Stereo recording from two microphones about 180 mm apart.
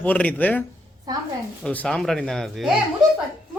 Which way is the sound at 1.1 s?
20° right (ahead or behind).